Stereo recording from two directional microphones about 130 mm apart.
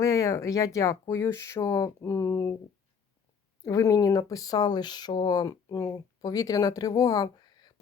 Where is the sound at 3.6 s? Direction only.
25° left (ahead or behind).